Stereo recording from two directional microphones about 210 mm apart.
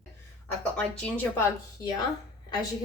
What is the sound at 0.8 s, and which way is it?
Speech, 5° left (ahead or behind).